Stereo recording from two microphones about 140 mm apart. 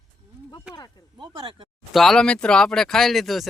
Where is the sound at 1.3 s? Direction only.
35° right (ahead or behind).